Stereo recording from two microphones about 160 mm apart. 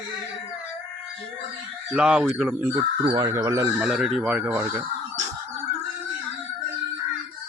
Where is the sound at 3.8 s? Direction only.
5° right (ahead or behind).